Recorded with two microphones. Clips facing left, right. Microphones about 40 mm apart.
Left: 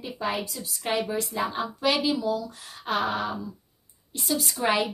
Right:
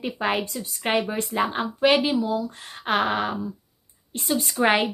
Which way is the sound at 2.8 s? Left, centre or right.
Right.